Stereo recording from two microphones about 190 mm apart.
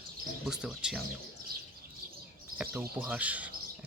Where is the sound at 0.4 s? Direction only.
Centre (ahead or behind).